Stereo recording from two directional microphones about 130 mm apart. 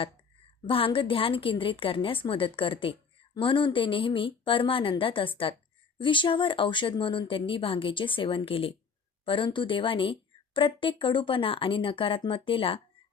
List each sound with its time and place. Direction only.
0.7 s a woman's voice: 40° left (ahead or behind)